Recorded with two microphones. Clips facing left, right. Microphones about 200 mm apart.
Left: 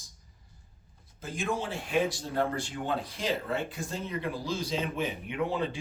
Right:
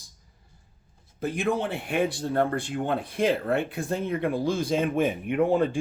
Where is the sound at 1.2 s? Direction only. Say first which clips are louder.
Right 6 dB; 60° right (ahead or behind).